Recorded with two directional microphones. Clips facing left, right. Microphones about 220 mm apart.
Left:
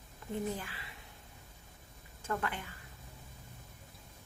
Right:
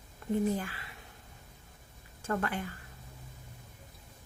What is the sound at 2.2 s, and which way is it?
Speech, 45° right (ahead or behind).